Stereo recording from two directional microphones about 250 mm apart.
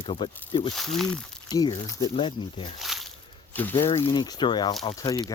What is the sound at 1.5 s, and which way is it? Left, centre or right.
Speech, centre.